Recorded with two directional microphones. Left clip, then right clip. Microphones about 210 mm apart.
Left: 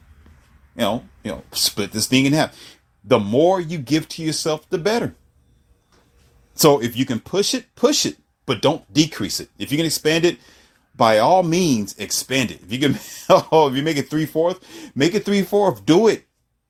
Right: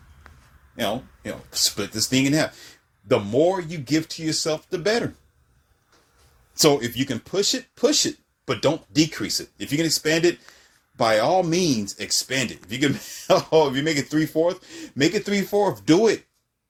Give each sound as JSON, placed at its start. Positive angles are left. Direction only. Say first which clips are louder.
{"t": 0.8, "sound": "speech", "louder": "left 4 dB", "side_deg": 45}
{"t": 6.5, "sound": "speech", "louder": "left 4 dB", "side_deg": 40}